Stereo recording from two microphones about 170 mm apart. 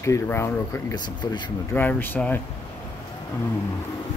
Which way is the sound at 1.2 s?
25° left (ahead or behind).